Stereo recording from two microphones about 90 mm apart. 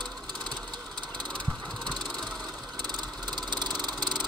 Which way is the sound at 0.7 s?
55° right (ahead or behind).